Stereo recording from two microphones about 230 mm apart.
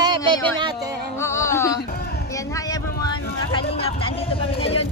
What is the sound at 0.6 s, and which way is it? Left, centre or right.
Speech, centre.